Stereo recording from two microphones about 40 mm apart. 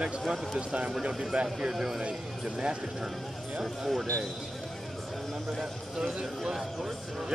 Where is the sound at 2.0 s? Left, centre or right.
Right.